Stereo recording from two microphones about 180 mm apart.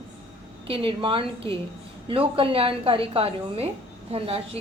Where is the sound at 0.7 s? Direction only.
30° right (ahead or behind).